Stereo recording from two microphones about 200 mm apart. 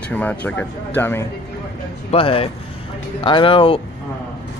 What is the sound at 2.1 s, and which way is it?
Speech, 25° left (ahead or behind).